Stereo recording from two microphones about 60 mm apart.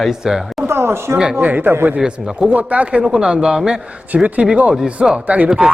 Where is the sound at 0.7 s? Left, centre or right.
Right.